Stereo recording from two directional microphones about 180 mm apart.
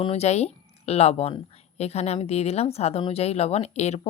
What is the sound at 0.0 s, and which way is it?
Speech, 35° left (ahead or behind).